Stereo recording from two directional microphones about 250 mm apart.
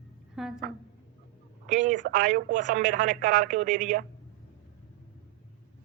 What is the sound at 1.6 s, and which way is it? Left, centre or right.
Speech, right.